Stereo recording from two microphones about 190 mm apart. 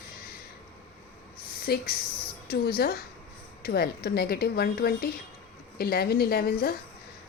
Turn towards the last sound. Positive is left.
turn(degrees=55)  # may be behind; listen again after turning